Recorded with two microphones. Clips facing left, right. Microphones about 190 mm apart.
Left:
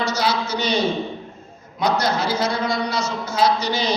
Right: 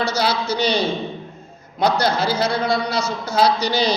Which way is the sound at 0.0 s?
30° right (ahead or behind).